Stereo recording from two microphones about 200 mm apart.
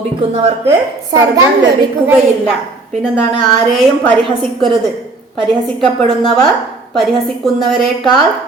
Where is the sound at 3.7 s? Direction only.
Centre (ahead or behind).